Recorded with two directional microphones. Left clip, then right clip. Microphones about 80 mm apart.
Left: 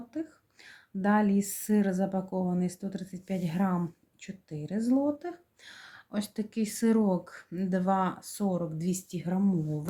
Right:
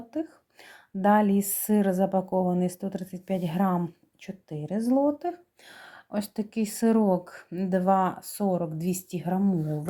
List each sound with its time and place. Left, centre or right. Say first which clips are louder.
0.1 s speech: right 5 dB; right